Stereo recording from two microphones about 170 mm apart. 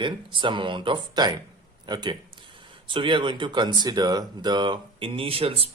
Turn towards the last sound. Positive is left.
turn(degrees=-35)  # may be behind; listen again after turning